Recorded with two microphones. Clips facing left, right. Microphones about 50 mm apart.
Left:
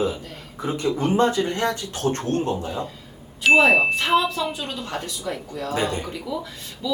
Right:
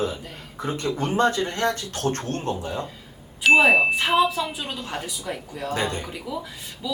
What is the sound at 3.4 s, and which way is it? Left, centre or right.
A woman's voice, centre.